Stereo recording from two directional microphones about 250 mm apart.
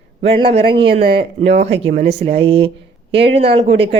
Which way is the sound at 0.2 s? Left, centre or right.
Right.